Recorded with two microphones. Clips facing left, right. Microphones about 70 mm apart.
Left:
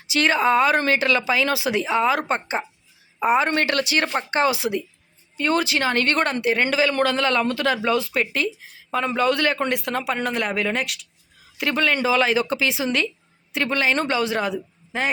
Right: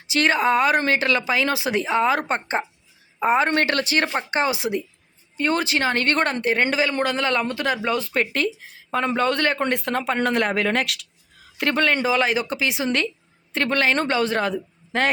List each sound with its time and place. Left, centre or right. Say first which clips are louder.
0.1 s a man's voice: even; right
4.1 s a man's voice: left 2 dB; centre; by 10.9 s right
11.5 s a man's voice: right 1 dB; right
12.0 s speech: left 1 dB; right
13.5 s a man's voice: right 1 dB; right